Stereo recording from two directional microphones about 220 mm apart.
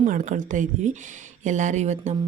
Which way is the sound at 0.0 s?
35° right (ahead or behind).